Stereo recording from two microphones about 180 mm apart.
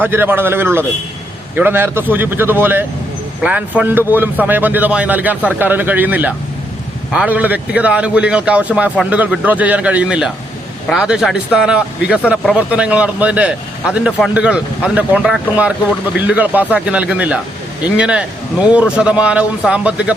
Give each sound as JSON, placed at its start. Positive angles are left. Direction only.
{"t": 0.0, "sound": "a man's voice", "side_deg": -10}